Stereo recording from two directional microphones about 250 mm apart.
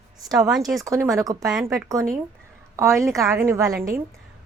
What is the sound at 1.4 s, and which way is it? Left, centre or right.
Speech, centre.